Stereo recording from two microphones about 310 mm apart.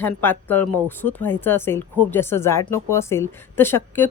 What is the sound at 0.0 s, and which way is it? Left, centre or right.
Speech, centre.